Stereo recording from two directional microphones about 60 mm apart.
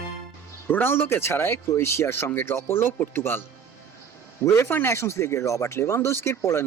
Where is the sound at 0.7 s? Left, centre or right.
Left.